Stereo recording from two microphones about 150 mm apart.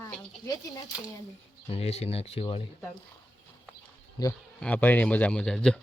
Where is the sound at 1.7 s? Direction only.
45° left (ahead or behind).